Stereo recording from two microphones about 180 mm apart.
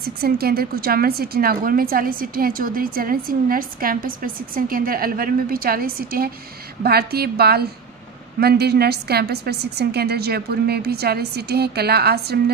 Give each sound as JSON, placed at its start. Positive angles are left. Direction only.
{"t": 0.0, "sound": "a woman's voice", "side_deg": -60}